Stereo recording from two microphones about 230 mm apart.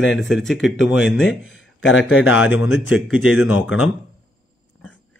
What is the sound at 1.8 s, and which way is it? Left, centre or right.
Speech, left.